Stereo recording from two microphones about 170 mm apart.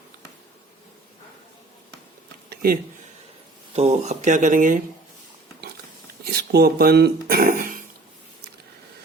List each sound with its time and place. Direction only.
2.5 s a sound: 60° right (ahead or behind)
3.8 s speech: 40° right (ahead or behind)
6.2 s speech: 65° right (ahead or behind)